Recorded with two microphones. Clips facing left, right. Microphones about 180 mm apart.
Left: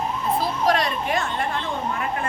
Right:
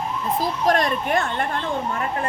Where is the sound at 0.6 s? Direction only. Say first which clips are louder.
Right 3 dB; 50° right (ahead or behind).